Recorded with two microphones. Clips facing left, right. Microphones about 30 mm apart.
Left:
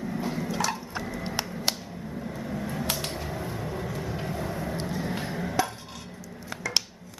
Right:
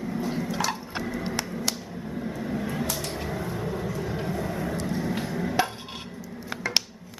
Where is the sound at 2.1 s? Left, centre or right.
Centre.